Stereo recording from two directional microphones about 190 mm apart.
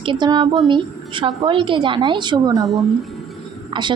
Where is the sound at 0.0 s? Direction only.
25° right (ahead or behind).